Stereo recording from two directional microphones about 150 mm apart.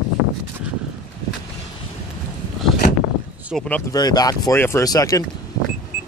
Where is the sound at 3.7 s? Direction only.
25° left (ahead or behind).